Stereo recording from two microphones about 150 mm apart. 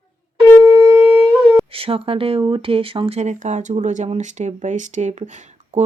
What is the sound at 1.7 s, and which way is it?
Speech, 40° right (ahead or behind).